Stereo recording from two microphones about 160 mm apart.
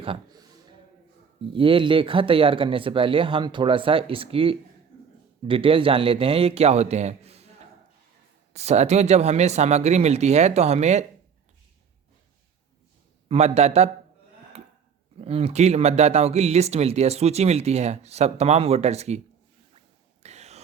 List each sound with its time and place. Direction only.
0.0 s speech: 30° right (ahead or behind)
1.5 s speech: 35° right (ahead or behind)
8.5 s speech: 45° right (ahead or behind)
13.2 s speech: 40° right (ahead or behind)
15.2 s speech: 40° right (ahead or behind)
20.2 s a sound: 45° right (ahead or behind)